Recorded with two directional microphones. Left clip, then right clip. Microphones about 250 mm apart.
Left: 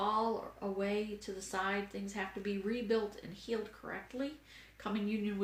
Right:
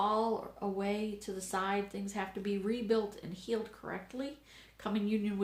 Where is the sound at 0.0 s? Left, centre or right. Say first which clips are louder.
Right 2 dB; right.